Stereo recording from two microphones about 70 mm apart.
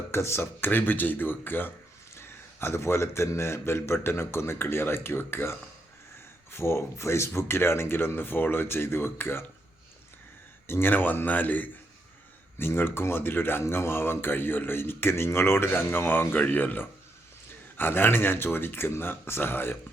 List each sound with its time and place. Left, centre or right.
0.1 s speech: left
10.7 s speech: left